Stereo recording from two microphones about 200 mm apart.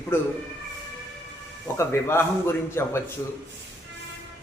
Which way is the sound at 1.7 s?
10° left (ahead or behind).